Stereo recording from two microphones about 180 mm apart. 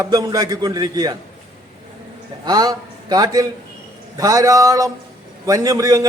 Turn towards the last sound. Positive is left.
turn(degrees=-20)  # may be behind; listen again after turning